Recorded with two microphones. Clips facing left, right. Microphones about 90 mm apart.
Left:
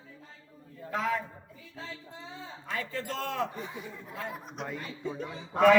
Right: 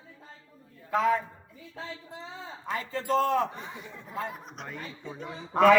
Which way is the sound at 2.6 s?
30° right (ahead or behind).